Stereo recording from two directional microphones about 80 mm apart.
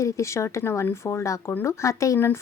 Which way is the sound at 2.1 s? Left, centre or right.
Left.